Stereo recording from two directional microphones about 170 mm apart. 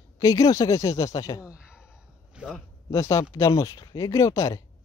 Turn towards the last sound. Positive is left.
turn(degrees=20)  # may be behind; listen again after turning